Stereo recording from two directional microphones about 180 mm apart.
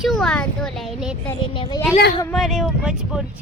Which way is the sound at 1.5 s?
30° left (ahead or behind).